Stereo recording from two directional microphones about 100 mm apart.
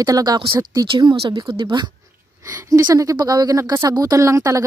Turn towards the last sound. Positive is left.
turn(degrees=-30)  # may be behind; listen again after turning